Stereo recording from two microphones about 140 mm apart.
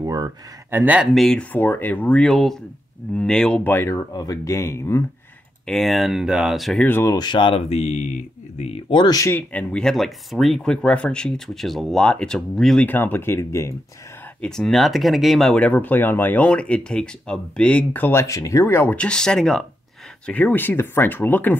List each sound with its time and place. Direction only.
0.0 s speech: 30° right (ahead or behind)
0.7 s speech: 15° right (ahead or behind)
1.1 s speech: 5° left (ahead or behind)
5.7 s speech: centre (ahead or behind)
6.8 s speech: 15° left (ahead or behind)
7.2 s speech: 35° left (ahead or behind); by 8.8 s 50° left (ahead or behind)
8.9 s speech: 30° left (ahead or behind)
9.5 s speech: 10° left (ahead or behind)
12.8 s speech: 15° left (ahead or behind)
14.4 s speech: 5° left (ahead or behind)